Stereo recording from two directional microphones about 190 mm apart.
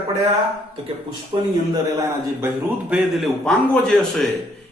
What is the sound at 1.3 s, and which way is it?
A man's voice, 25° right (ahead or behind).